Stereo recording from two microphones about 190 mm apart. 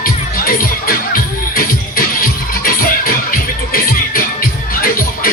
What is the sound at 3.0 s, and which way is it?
Music, 50° left (ahead or behind).